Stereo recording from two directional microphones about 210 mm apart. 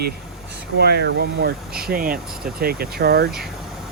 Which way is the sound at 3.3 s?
Centre (ahead or behind).